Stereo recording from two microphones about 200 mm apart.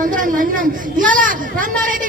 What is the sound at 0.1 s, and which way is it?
Speech, 40° right (ahead or behind).